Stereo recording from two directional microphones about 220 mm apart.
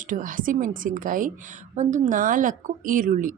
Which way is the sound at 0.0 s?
35° right (ahead or behind).